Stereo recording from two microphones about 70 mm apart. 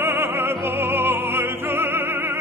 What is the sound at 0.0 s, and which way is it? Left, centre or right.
Music, right.